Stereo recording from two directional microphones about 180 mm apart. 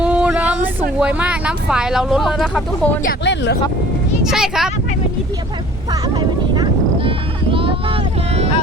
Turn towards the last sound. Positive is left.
turn(degrees=-30)  # may be behind; listen again after turning